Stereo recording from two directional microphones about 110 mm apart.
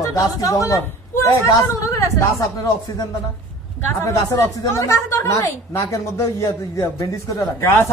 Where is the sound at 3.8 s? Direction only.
25° left (ahead or behind).